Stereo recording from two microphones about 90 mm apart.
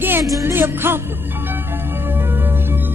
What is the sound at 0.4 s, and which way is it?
Speech, 25° right (ahead or behind).